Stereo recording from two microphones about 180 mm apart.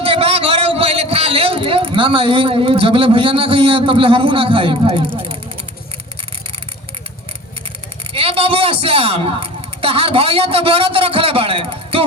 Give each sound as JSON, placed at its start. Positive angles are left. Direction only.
{"t": 0.0, "sound": "a man's voice", "side_deg": -30}
{"t": 8.1, "sound": "a man's voice", "side_deg": -30}